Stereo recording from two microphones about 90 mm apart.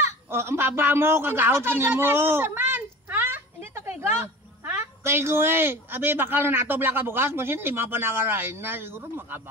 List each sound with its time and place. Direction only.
0.3 s a man's voice: 25° right (ahead or behind)